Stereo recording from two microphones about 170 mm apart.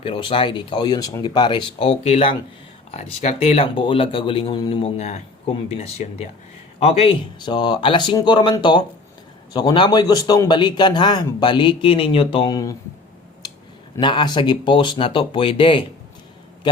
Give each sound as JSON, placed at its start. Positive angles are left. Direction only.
{"t": 0.0, "sound": "a man's voice", "side_deg": 30}
{"t": 14.0, "sound": "a man's voice", "side_deg": 25}